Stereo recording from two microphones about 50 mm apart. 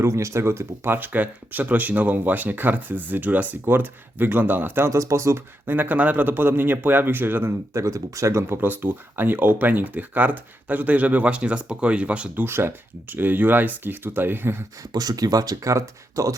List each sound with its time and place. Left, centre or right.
0.0 s speech: right
0.9 s speech: right
4.9 s speech: right
5.6 s speech: right
7.7 s speech: right
8.4 s speech: right
12.5 s speech: right
15.6 s speech: right